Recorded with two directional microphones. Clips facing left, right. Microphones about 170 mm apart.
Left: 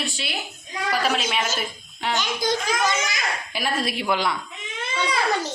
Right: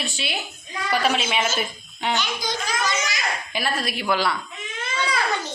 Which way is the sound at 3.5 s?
10° left (ahead or behind).